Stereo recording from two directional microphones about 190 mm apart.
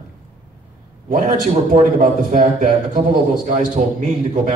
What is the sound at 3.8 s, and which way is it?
Speech, 35° right (ahead or behind).